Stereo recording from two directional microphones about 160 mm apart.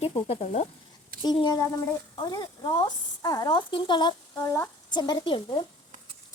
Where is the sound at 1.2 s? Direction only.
25° left (ahead or behind).